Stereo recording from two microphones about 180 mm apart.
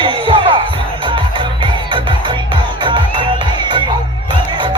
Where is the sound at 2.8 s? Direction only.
25° right (ahead or behind).